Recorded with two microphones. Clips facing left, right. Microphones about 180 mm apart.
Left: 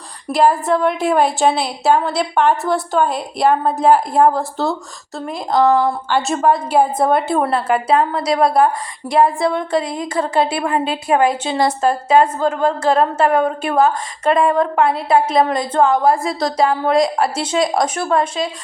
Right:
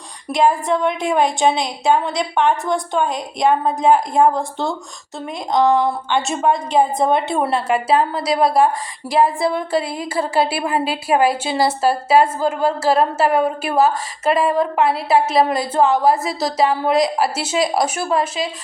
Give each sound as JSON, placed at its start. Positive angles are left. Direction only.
{"t": 0.3, "sound": "a woman's voice", "side_deg": 5}
{"t": 7.5, "sound": "a woman's voice", "side_deg": -25}
{"t": 8.2, "sound": "a woman's voice", "side_deg": 0}